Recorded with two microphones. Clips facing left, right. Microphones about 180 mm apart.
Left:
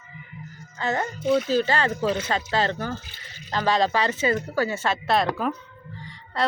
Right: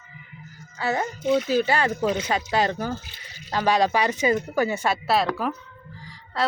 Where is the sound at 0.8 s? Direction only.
10° right (ahead or behind).